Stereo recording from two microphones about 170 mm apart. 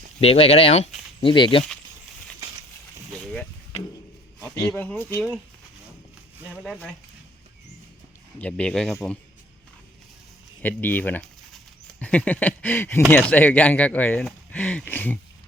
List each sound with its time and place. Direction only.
0.2 s speech: 35° left (ahead or behind)
3.2 s a sound: 5° left (ahead or behind)
4.8 s speech: 10° left (ahead or behind)
6.5 s speech: 5° left (ahead or behind)
8.4 s speech: 10° left (ahead or behind)
10.6 s speech: 10° left (ahead or behind)